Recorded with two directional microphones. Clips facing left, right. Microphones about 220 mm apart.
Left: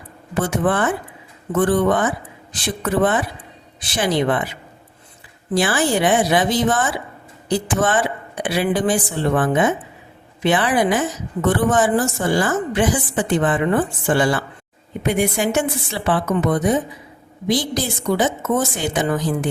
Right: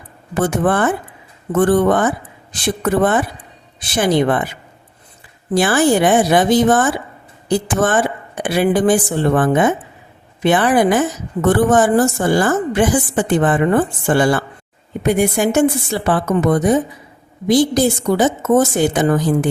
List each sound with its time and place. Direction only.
0.3 s a woman's voice: 45° right (ahead or behind)
5.5 s a woman's voice: 50° right (ahead or behind)